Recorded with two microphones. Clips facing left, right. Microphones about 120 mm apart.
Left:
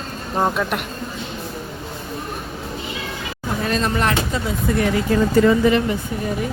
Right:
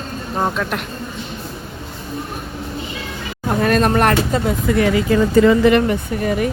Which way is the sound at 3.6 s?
55° right (ahead or behind).